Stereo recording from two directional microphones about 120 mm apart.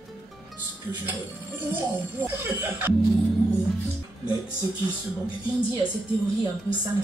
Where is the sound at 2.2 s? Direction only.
15° right (ahead or behind).